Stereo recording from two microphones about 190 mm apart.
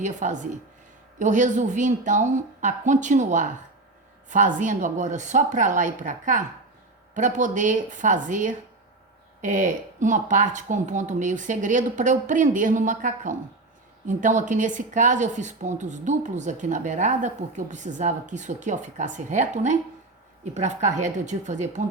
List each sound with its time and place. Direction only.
0.0 s speech: 40° right (ahead or behind)